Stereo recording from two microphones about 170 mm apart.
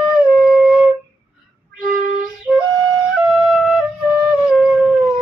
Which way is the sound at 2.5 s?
Centre (ahead or behind).